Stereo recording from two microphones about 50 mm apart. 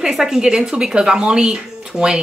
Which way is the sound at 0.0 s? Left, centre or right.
Centre.